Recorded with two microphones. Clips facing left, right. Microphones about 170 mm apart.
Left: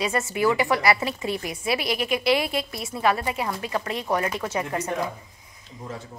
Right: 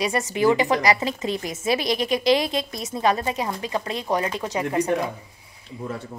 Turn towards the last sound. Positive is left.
turn(degrees=-60)  # may be behind; listen again after turning